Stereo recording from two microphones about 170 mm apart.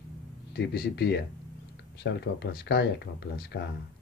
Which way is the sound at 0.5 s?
70° left (ahead or behind).